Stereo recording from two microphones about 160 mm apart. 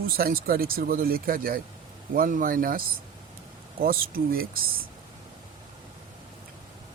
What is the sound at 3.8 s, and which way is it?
Speech, 65° right (ahead or behind).